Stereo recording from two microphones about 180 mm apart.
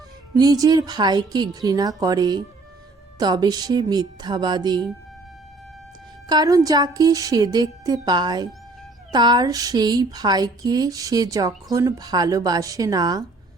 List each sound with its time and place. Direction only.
0.3 s speech: 20° right (ahead or behind)
6.2 s speech: 20° right (ahead or behind)